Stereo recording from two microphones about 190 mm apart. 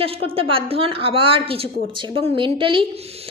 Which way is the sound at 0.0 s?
30° right (ahead or behind).